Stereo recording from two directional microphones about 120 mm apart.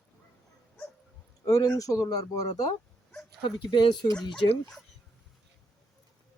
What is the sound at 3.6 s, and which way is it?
Speech, 45° left (ahead or behind).